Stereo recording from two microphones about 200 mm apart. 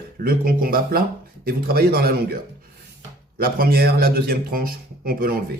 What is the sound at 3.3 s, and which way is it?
Speech, 50° right (ahead or behind).